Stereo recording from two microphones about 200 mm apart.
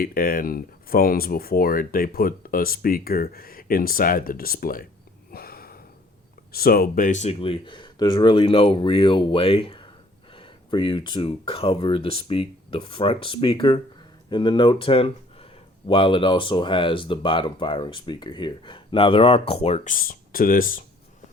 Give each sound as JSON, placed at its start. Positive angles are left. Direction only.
{"t": 0.0, "sound": "speech", "side_deg": 45}
{"t": 5.3, "sound": "sniff", "side_deg": 50}
{"t": 6.5, "sound": "speech", "side_deg": 50}